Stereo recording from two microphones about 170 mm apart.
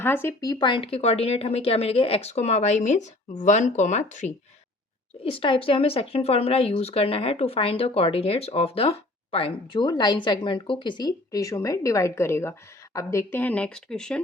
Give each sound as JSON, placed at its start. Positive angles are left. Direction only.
{"t": 0.0, "sound": "speech", "side_deg": 15}
{"t": 5.2, "sound": "speech", "side_deg": 35}